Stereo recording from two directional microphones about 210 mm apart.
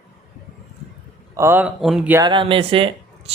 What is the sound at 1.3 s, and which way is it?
Speech, 10° right (ahead or behind).